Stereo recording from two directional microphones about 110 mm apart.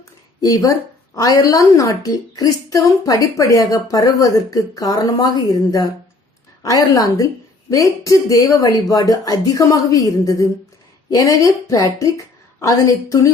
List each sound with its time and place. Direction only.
0.4 s a woman's voice: 30° left (ahead or behind)